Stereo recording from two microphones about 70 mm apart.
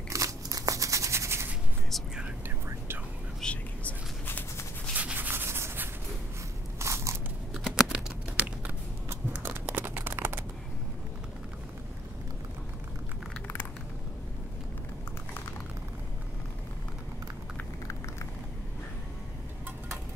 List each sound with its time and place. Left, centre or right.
0.1 s a sound: right
3.4 s whispering: centre
3.8 s whispering: left
4.9 s sanding: right
6.8 s crunch: right
7.5 s typing: centre
9.1 s a sound: right